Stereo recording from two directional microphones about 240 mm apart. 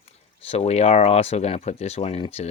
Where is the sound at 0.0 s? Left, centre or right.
Left.